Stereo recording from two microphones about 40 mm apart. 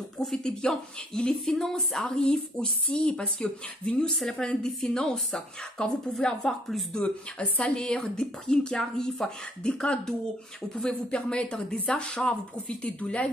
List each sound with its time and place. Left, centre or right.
0.2 s a woman's voice: centre
2.0 s a woman's voice: centre
6.9 s a woman's voice: left
12.8 s speech: left